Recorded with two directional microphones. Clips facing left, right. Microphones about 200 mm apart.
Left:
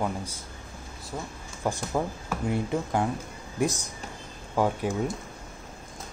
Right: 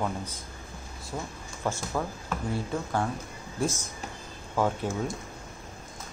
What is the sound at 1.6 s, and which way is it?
A man's voice, 10° left (ahead or behind).